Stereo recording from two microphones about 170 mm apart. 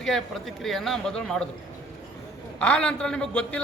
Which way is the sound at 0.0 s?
Centre (ahead or behind).